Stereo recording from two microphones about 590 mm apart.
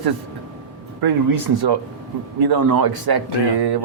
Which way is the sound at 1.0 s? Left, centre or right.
Right.